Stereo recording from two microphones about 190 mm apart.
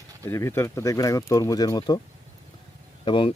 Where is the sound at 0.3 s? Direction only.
15° left (ahead or behind).